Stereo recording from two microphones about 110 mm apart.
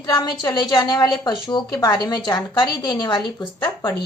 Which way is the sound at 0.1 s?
40° left (ahead or behind).